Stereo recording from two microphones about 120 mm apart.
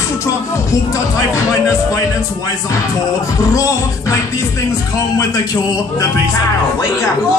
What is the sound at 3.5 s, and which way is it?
Music, 30° left (ahead or behind).